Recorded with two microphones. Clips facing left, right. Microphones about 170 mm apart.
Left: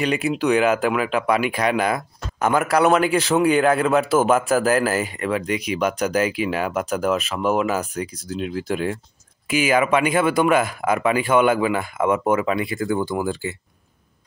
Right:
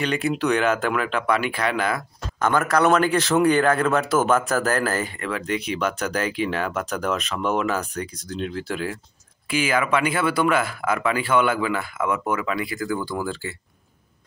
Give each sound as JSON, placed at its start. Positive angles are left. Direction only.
{"t": 0.0, "sound": "a man's voice", "side_deg": 10}